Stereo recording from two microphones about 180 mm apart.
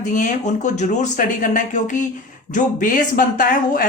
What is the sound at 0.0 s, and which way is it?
Speech, 45° left (ahead or behind).